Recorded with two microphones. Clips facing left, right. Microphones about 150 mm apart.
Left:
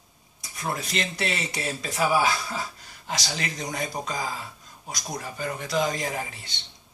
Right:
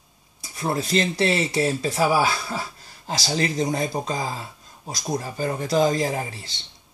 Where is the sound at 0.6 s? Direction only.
30° right (ahead or behind).